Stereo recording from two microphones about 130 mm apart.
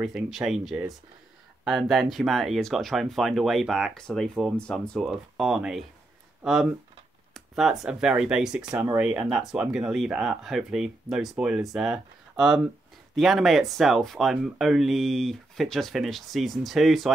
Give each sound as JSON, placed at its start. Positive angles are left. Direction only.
{"t": 0.0, "sound": "speech", "side_deg": -5}